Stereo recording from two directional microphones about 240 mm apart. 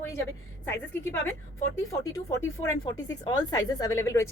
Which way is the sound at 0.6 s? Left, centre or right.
Centre.